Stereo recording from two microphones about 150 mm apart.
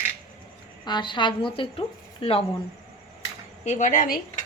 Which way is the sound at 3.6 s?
50° left (ahead or behind).